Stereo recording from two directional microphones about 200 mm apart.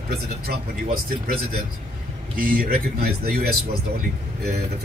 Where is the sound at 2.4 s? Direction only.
45° right (ahead or behind).